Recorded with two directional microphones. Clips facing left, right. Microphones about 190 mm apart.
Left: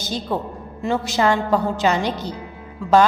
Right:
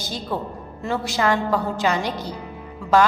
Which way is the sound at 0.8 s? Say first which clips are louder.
Left 3 dB; 20° left (ahead or behind).